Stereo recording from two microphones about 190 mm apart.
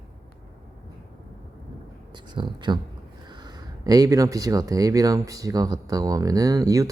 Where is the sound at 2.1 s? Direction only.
25° right (ahead or behind).